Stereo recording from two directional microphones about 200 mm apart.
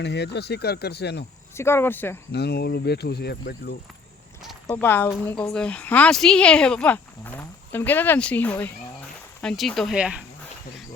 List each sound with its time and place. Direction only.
0.0 s speech: 60° left (ahead or behind)
1.5 s speech: 10° left (ahead or behind)
2.3 s speech: 55° left (ahead or behind)
4.7 s speech: 10° left (ahead or behind); by 10.2 s 5° right (ahead or behind)